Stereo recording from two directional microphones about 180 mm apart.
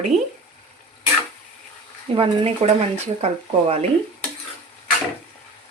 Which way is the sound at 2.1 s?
30° right (ahead or behind).